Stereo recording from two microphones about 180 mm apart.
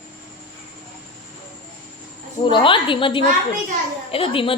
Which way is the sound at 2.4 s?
25° left (ahead or behind).